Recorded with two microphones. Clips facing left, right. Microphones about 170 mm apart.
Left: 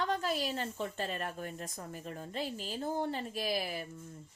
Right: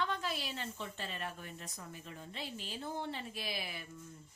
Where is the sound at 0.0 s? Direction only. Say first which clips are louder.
Left 5 dB; 40° left (ahead or behind).